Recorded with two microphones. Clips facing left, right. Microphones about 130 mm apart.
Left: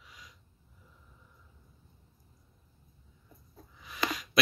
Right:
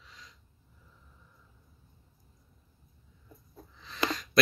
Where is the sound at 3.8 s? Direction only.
10° left (ahead or behind).